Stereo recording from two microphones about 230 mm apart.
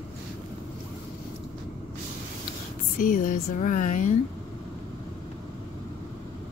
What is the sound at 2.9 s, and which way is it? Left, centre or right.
Speech, left.